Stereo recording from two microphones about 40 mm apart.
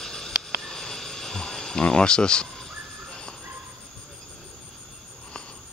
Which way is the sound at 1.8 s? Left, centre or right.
Left.